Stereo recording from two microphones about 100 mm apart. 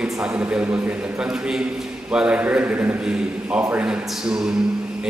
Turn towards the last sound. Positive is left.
turn(degrees=-10)  # may be behind; listen again after turning